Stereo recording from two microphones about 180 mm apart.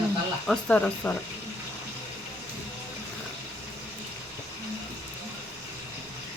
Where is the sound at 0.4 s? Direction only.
5° left (ahead or behind).